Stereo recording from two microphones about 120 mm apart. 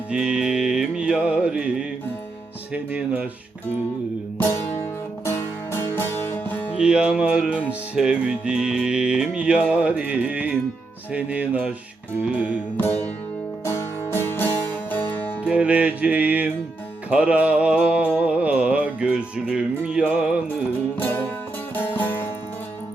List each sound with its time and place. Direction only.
0.1 s music: 5° right (ahead or behind)
2.7 s music: 10° right (ahead or behind)
4.4 s music: 20° left (ahead or behind)
6.7 s music: 10° right (ahead or behind)
12.7 s music: 20° left (ahead or behind)
15.4 s music: 10° right (ahead or behind)
21.0 s music: 20° left (ahead or behind)